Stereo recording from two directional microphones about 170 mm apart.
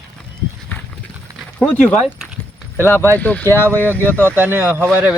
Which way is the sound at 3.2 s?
10° left (ahead or behind).